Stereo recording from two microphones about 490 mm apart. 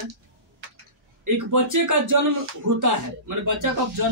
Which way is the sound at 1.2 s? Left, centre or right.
Right.